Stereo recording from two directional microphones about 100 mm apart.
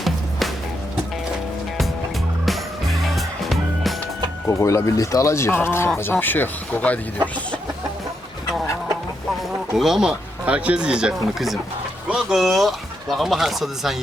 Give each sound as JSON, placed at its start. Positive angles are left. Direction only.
{"t": 0.0, "sound": "music", "side_deg": 0}
{"t": 2.5, "sound": "music", "side_deg": 0}
{"t": 4.4, "sound": "speech", "side_deg": 30}
{"t": 9.7, "sound": "speech", "side_deg": -5}